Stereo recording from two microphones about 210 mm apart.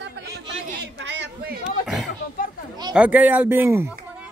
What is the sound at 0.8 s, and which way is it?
Chatter, 55° right (ahead or behind).